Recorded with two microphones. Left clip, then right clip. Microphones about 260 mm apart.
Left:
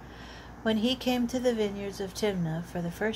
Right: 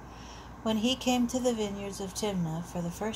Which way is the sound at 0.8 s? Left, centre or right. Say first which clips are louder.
Left 1 dB; left.